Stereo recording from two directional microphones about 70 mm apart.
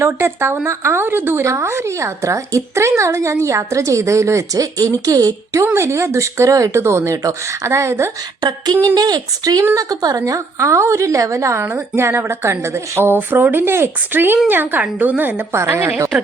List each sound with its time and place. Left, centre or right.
0.0 s a woman's voice: right
5.7 s a woman's voice: right
8.4 s a sound: right
9.0 s a woman's voice: right
15.5 s speech: right